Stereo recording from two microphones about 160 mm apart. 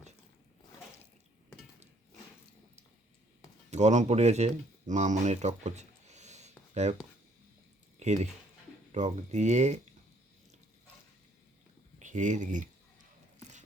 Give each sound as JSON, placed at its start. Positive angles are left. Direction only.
{"t": 3.7, "sound": "speech", "side_deg": -45}
{"t": 11.9, "sound": "speech", "side_deg": -50}